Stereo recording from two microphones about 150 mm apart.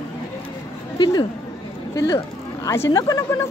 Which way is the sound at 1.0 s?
30° left (ahead or behind).